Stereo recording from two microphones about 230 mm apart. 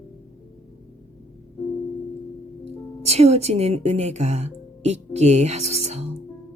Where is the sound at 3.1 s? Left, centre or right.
Right.